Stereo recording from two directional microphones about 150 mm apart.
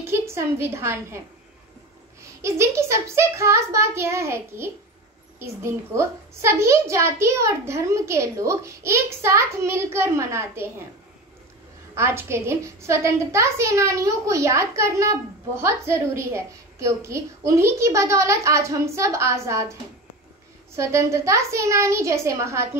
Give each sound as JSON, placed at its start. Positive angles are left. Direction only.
{"t": 0.0, "sound": "a woman's voice", "side_deg": -15}
{"t": 2.2, "sound": "a child's voice", "side_deg": -20}
{"t": 11.9, "sound": "a woman's voice", "side_deg": -15}